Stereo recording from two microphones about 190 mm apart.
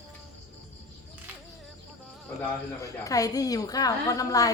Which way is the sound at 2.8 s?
20° left (ahead or behind).